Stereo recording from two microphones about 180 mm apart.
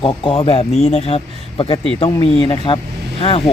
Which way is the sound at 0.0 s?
30° left (ahead or behind).